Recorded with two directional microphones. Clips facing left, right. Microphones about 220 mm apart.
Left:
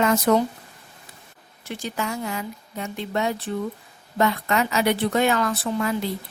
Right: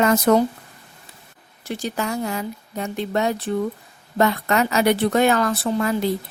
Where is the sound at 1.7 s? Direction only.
40° right (ahead or behind).